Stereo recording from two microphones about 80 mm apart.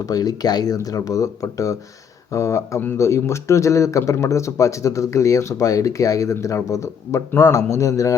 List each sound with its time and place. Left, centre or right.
0.1 s speech: left